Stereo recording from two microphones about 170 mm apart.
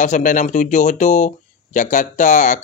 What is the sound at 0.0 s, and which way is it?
Speech, 45° left (ahead or behind).